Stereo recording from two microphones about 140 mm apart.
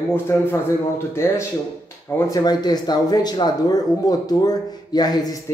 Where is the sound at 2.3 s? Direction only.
30° left (ahead or behind).